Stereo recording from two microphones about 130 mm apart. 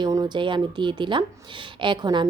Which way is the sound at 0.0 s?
30° right (ahead or behind).